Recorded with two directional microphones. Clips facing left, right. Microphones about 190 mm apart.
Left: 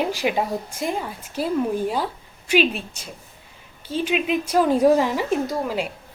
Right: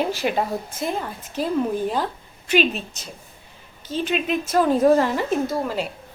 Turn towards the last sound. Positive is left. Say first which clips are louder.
# even
turn(degrees=10)  # may be behind; listen again after turning